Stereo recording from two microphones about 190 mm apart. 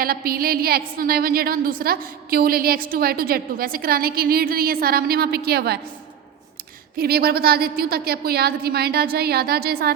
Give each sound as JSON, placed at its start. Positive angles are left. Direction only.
{"t": 0.0, "sound": "a woman's voice", "side_deg": -50}
{"t": 6.9, "sound": "a woman's voice", "side_deg": -55}